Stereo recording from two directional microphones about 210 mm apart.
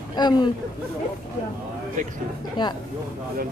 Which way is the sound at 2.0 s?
35° right (ahead or behind).